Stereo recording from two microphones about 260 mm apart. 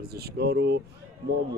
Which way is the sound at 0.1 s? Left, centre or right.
Right.